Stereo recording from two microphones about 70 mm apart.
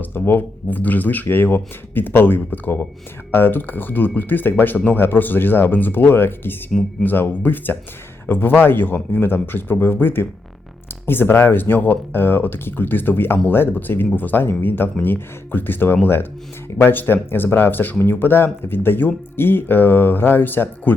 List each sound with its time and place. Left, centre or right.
0.0 s speech: left